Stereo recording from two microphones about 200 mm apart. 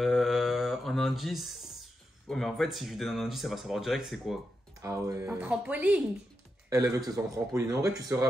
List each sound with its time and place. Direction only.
0.0 s mantra: centre (ahead or behind)
2.2 s speech: centre (ahead or behind)
4.8 s a man's voice: 15° right (ahead or behind)